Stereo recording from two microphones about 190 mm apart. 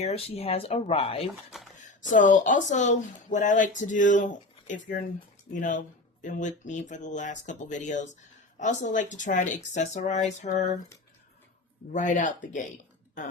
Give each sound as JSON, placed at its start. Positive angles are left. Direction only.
{"t": 0.0, "sound": "speech", "side_deg": 30}
{"t": 1.5, "sound": "speech", "side_deg": 0}
{"t": 2.0, "sound": "speech", "side_deg": 45}
{"t": 11.9, "sound": "speech", "side_deg": 40}